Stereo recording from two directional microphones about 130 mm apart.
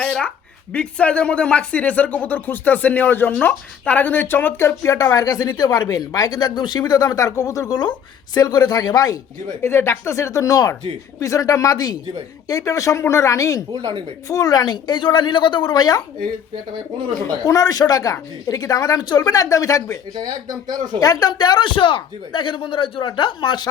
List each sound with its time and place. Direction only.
0.0 s a woman's voice: 5° left (ahead or behind); by 16.0 s 30° left (ahead or behind)
17.2 s a woman's voice: 25° left (ahead or behind)
20.2 s speech: 30° right (ahead or behind)
21.0 s speech: 30° left (ahead or behind)